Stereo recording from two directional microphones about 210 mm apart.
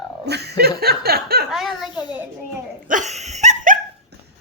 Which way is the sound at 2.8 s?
35° right (ahead or behind).